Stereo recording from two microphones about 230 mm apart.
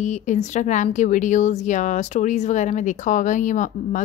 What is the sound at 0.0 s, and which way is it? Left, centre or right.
A woman's voice, left.